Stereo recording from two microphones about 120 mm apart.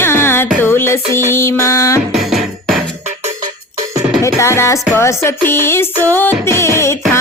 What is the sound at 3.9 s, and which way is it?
Music, 30° right (ahead or behind).